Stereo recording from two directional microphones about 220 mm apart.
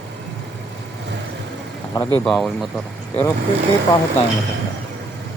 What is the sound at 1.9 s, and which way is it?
Speech, 15° left (ahead or behind).